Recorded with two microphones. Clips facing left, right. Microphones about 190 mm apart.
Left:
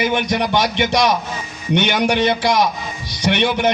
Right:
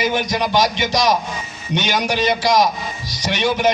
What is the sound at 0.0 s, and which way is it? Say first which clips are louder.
A man's voice: left 1 dB; 60° left (ahead or behind).